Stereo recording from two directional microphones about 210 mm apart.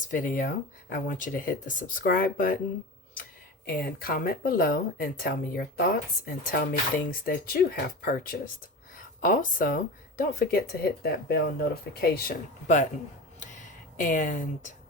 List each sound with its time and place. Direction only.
0.1 s speech: 40° left (ahead or behind)
3.7 s speech: 45° left (ahead or behind)
12.6 s speech: 35° left (ahead or behind)
14.0 s speech: 40° left (ahead or behind)